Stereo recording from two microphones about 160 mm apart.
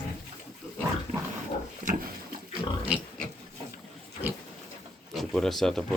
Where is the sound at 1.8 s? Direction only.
55° right (ahead or behind).